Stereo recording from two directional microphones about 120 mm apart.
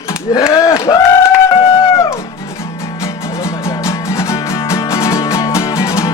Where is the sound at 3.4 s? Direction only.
25° left (ahead or behind).